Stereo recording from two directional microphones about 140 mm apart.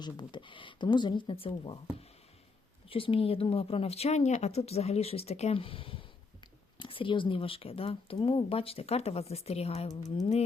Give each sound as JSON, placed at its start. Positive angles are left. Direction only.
{"t": 0.0, "sound": "speech", "side_deg": 35}
{"t": 2.9, "sound": "speech", "side_deg": 40}
{"t": 9.9, "sound": "music", "side_deg": 25}